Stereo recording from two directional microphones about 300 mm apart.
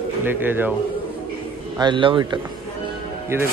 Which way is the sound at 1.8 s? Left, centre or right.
Centre.